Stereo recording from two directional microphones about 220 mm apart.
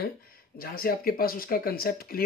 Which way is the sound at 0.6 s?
40° left (ahead or behind).